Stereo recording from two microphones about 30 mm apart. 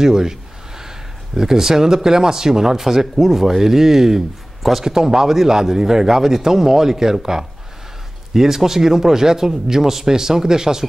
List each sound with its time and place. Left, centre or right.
0.0 s a man's voice: centre